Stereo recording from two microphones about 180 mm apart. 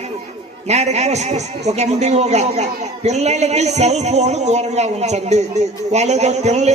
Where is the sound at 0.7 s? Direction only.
40° right (ahead or behind).